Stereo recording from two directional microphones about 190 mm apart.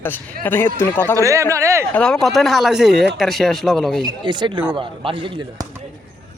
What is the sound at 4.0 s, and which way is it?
Speech, 20° right (ahead or behind).